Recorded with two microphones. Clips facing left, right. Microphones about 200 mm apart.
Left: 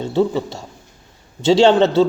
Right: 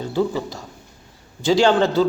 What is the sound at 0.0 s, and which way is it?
A man's voice, 25° left (ahead or behind).